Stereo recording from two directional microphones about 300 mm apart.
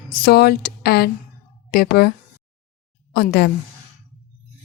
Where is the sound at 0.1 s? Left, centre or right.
Left.